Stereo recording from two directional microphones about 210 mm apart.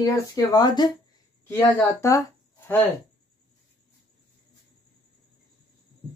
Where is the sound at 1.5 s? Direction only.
10° left (ahead or behind).